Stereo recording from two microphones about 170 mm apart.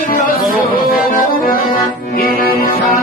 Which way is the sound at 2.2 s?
60° left (ahead or behind).